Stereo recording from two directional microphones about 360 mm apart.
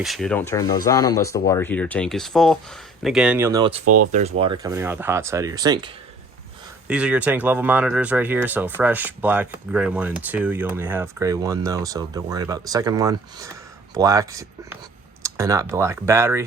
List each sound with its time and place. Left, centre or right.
0.0 s speech: centre
3.8 s speech: right
4.1 s speech: centre